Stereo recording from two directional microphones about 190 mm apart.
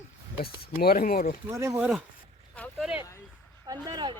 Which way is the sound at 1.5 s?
15° right (ahead or behind).